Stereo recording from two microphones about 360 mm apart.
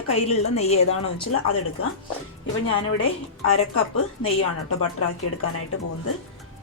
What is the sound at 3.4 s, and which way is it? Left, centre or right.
Speech, left.